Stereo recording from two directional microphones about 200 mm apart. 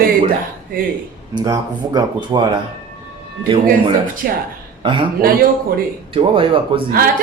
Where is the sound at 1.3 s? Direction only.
20° right (ahead or behind).